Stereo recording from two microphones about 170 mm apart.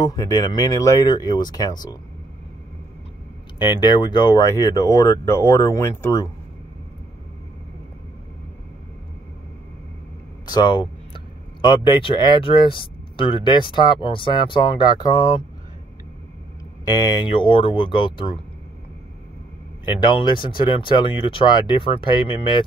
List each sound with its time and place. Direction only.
0.0 s speech: 20° left (ahead or behind)
3.5 s speech: 25° left (ahead or behind)
10.4 s speech: 25° left (ahead or behind)
16.9 s speech: 25° left (ahead or behind)
19.8 s speech: 30° left (ahead or behind)